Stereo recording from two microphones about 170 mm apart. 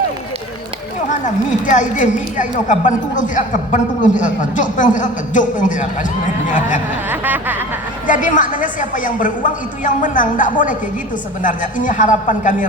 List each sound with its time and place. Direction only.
1.2 s a woman's voice: 45° left (ahead or behind)
7.1 s a sound: 10° right (ahead or behind)
8.0 s a woman's voice: 50° left (ahead or behind)